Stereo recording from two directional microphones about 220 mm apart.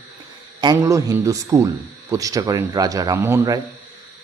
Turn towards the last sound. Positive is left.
turn(degrees=-15)  # may be behind; listen again after turning